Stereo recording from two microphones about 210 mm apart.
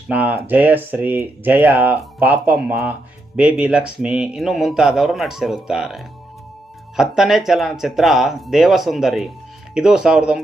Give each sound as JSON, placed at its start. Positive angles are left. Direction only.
{"t": 0.1, "sound": "a man's voice", "side_deg": -10}